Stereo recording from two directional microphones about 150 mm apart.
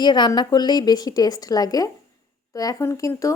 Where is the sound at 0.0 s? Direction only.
30° left (ahead or behind).